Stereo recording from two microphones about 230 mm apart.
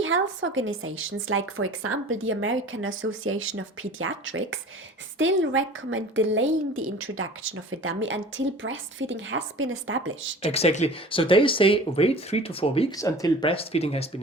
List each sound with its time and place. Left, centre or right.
0.0 s a woman's voice: right
10.4 s speech: left